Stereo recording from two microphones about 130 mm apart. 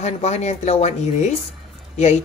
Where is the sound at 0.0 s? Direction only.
60° left (ahead or behind).